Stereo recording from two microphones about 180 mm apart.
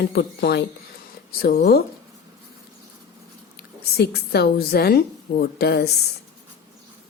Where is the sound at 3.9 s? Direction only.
60° left (ahead or behind).